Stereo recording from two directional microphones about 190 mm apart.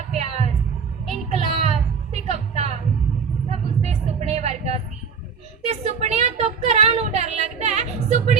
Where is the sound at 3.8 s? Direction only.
35° right (ahead or behind).